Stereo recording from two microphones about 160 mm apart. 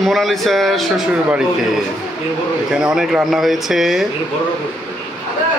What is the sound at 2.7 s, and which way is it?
A man's voice, 5° right (ahead or behind).